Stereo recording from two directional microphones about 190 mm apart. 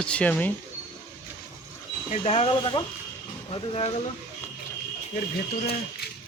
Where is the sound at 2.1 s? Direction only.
35° left (ahead or behind).